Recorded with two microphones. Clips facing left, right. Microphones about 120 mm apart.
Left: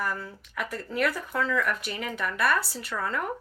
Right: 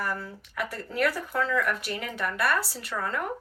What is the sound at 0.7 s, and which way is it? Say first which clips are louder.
Speech: even; 35° right (ahead or behind).